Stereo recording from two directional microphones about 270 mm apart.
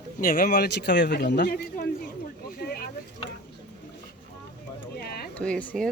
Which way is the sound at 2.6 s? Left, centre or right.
Left.